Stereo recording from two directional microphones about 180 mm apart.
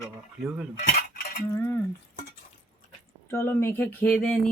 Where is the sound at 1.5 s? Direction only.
15° left (ahead or behind).